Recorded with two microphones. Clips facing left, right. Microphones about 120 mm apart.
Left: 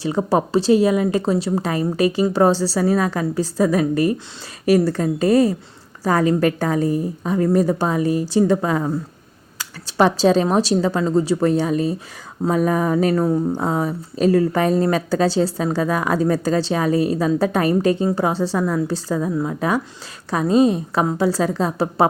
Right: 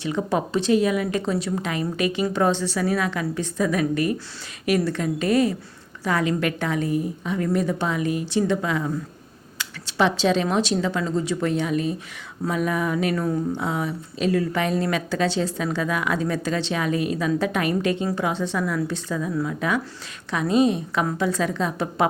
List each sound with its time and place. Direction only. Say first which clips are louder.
0.0 s speech: left 5 dB; 35° left (ahead or behind)